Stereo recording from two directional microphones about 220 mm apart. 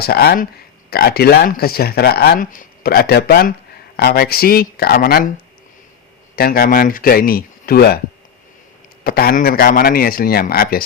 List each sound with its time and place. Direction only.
0.0 s speech: 45° left (ahead or behind)
6.3 s speech: 40° left (ahead or behind)
9.0 s speech: 45° left (ahead or behind)